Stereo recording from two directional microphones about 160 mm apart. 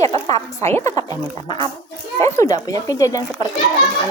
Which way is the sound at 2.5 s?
20° left (ahead or behind).